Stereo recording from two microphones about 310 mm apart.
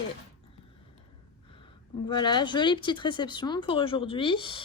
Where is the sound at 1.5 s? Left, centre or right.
Centre.